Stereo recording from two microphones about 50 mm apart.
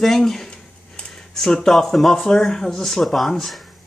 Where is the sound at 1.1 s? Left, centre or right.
Centre.